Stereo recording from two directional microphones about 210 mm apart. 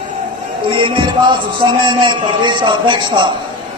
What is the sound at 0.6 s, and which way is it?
A man's voice, 25° right (ahead or behind).